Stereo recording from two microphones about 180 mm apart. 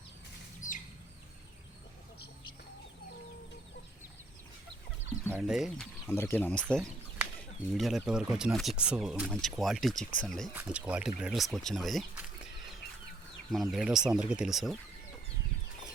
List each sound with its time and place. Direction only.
0.6 s a sound: 45° left (ahead or behind)
5.3 s speech: 5° right (ahead or behind)
10.5 s speech: 10° right (ahead or behind)
13.5 s speech: centre (ahead or behind)